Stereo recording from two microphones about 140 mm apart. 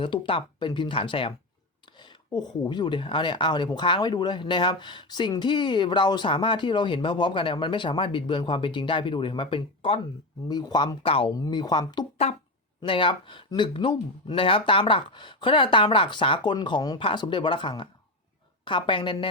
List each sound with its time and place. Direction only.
0.0 s speech: 35° left (ahead or behind)
11.3 s speech: 25° left (ahead or behind)